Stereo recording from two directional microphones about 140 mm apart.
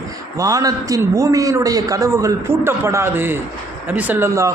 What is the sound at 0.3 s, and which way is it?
A man's voice, 25° right (ahead or behind).